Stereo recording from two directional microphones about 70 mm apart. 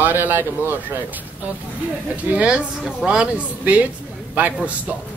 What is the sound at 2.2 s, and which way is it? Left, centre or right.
Speech, centre.